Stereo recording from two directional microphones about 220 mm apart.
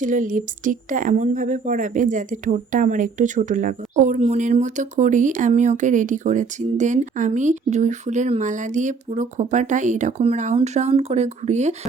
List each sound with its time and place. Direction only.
0.0 s speech: 35° right (ahead or behind)